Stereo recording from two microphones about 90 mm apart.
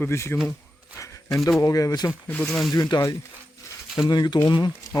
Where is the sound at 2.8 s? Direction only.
45° left (ahead or behind).